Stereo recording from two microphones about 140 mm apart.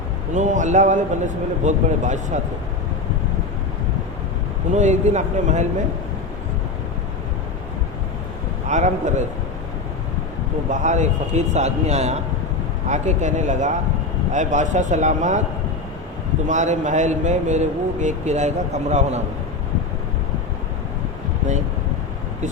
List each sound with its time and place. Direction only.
0.3 s speech: 60° right (ahead or behind)
4.7 s speech: 60° right (ahead or behind)
8.6 s speech: 60° right (ahead or behind)
10.7 s speech: 60° right (ahead or behind)
16.5 s speech: 60° right (ahead or behind)